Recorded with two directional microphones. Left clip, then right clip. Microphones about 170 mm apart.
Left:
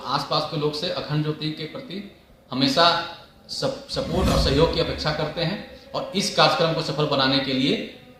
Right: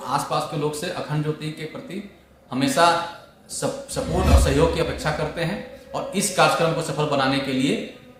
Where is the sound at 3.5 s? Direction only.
40° right (ahead or behind).